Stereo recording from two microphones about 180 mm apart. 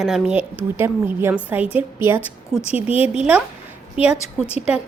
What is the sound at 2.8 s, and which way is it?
Speech, 10° right (ahead or behind).